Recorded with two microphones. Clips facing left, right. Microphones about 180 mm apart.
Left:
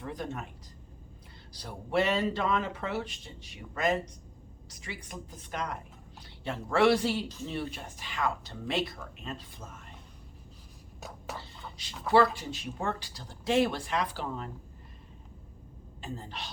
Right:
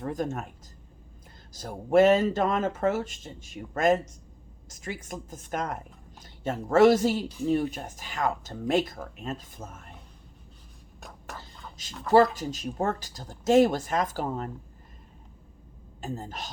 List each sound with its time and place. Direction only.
0.0 s speech: 45° right (ahead or behind)
1.5 s speech: 45° right (ahead or behind)
11.0 s a sound: centre (ahead or behind)
12.0 s speech: 40° right (ahead or behind)
16.0 s speech: 45° right (ahead or behind)